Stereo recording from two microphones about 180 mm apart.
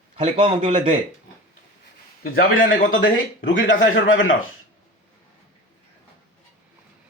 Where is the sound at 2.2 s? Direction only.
50° left (ahead or behind).